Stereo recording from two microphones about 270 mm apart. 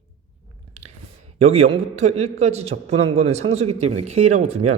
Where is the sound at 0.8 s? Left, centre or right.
Right.